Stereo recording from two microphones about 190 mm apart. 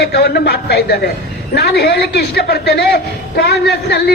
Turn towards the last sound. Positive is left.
turn(degrees=60)  # may be behind; listen again after turning